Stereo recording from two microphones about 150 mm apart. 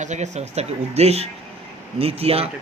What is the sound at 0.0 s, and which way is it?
Speech, 50° right (ahead or behind).